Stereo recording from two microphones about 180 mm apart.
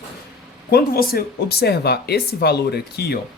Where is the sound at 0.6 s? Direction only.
60° left (ahead or behind).